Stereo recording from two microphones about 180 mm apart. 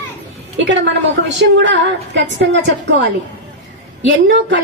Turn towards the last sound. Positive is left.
turn(degrees=-90)